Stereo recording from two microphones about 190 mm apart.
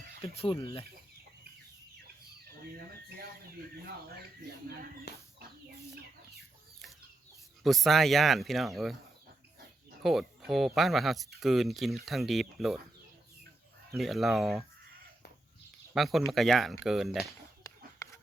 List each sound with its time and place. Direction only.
0.2 s speech: 25° left (ahead or behind)
5.1 s chicken: 60° left (ahead or behind)
7.6 s speech: centre (ahead or behind)
10.0 s speech: centre (ahead or behind)
13.9 s speech: centre (ahead or behind)
16.0 s speech: centre (ahead or behind)